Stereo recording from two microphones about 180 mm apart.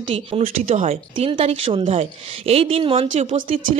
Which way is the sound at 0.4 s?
40° right (ahead or behind).